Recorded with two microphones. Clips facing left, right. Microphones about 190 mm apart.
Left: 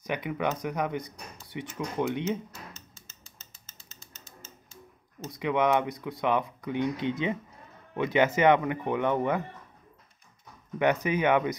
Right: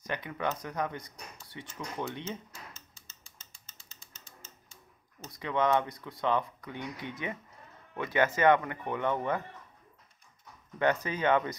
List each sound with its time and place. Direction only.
0.0 s speech: 15° left (ahead or behind)
5.2 s speech: 15° left (ahead or behind)
10.8 s speech: 15° left (ahead or behind)